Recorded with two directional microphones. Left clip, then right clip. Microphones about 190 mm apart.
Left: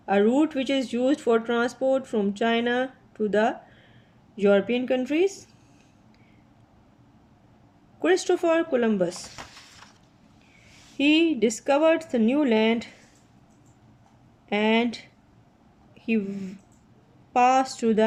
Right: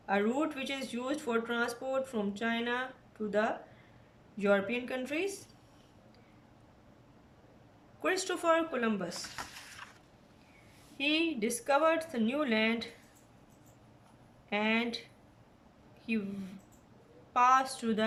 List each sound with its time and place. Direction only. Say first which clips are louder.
0.0 s speech: left 10 dB; 35° left (ahead or behind)
8.0 s speech: left 8 dB; 35° left (ahead or behind)
9.4 s a sound: left 1 dB; 15° left (ahead or behind)
10.9 s speech: left 10 dB; 35° left (ahead or behind)
14.5 s speech: left 8 dB; 35° left (ahead or behind)
16.0 s speech: left 9 dB; 35° left (ahead or behind)